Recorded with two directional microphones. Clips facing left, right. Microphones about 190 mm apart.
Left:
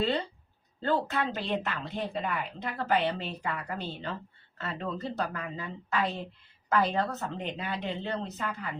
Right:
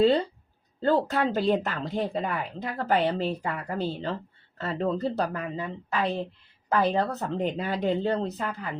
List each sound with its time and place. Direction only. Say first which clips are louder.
0.8 s speech: right 5 dB; 40° right (ahead or behind)